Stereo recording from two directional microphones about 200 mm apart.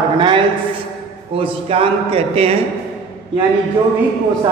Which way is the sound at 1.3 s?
30° right (ahead or behind).